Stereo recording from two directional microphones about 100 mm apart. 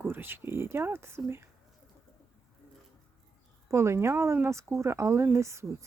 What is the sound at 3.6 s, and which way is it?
Speech, 25° right (ahead or behind).